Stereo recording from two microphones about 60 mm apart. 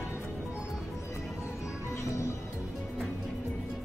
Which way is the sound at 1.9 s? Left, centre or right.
Left.